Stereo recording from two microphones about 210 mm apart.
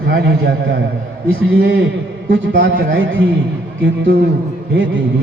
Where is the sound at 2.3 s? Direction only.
65° right (ahead or behind).